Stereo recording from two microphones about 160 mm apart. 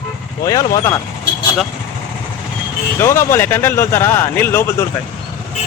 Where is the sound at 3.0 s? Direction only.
15° left (ahead or behind).